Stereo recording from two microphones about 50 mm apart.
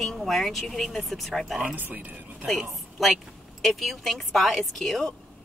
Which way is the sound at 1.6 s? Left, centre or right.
Right.